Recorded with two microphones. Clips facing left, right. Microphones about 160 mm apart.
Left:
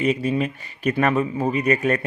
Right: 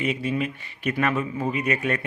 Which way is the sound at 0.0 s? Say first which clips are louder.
Left 4 dB; 40° left (ahead or behind).